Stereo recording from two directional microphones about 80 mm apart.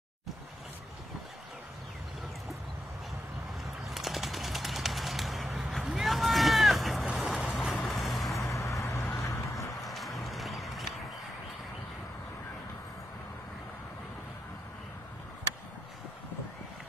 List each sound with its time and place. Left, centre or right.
3.9 s bird: centre
5.9 s vehicle: centre
8.5 s vehicle: left
9.2 s a sound: left
9.8 s music: centre